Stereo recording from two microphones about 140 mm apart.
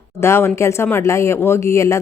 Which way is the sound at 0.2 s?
20° left (ahead or behind).